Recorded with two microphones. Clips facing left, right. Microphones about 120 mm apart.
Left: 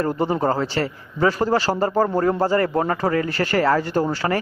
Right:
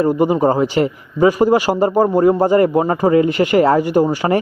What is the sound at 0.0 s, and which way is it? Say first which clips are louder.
A man's voice: right 7 dB; 15° right (ahead or behind).